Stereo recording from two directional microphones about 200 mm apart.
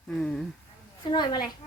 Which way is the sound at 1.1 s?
20° left (ahead or behind).